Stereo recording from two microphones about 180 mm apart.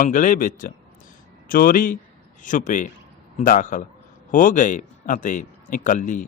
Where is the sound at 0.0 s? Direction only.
45° left (ahead or behind).